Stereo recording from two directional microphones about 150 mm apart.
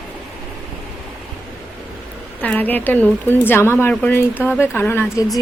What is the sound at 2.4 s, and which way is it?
Speech, 10° left (ahead or behind).